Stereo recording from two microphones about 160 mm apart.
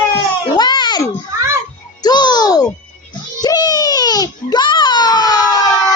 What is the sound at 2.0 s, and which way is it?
Music, 25° left (ahead or behind).